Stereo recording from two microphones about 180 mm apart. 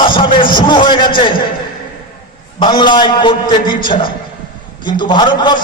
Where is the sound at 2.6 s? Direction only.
25° left (ahead or behind).